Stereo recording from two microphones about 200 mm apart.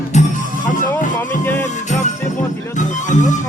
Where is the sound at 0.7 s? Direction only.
40° left (ahead or behind).